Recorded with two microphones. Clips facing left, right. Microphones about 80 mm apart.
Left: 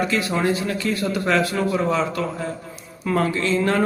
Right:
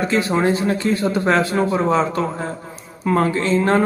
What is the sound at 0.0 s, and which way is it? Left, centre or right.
Speech, right.